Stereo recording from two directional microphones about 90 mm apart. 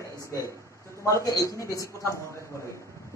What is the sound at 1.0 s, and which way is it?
Speech, 40° left (ahead or behind).